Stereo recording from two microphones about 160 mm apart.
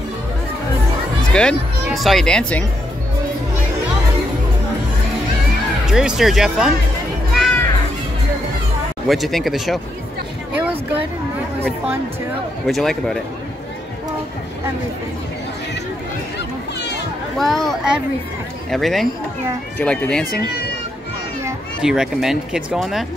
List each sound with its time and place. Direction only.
1.3 s speech: 5° left (ahead or behind)
5.9 s speech: 5° right (ahead or behind)
7.3 s children playing: centre (ahead or behind)
9.0 s speech: centre (ahead or behind)
10.5 s a sound: 10° right (ahead or behind)
12.6 s speech: centre (ahead or behind)
16.3 s a sound: 90° left
17.4 s speech: centre (ahead or behind)
21.8 s speech: 5° right (ahead or behind)